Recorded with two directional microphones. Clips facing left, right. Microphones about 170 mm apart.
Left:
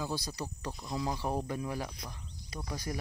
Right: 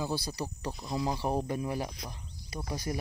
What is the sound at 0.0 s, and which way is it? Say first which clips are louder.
Speech: right 3 dB; 10° right (ahead or behind).